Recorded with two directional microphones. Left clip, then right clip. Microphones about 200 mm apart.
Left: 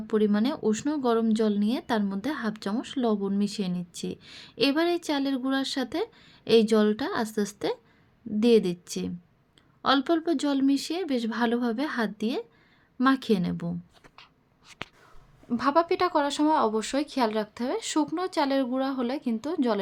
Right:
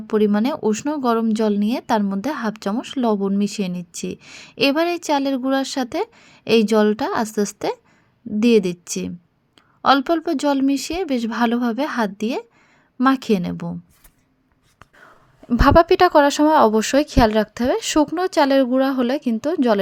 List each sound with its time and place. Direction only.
0.1 s speech: 25° right (ahead or behind)
15.4 s speech: 40° right (ahead or behind)